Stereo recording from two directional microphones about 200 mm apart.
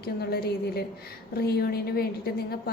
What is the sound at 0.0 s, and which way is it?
A woman's voice, 50° left (ahead or behind).